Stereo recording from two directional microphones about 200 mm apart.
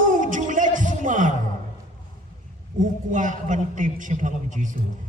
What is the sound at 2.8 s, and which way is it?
A man's voice, 40° right (ahead or behind).